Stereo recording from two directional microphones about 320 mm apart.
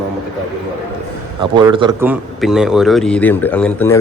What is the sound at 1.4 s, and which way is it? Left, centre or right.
A man's voice, centre.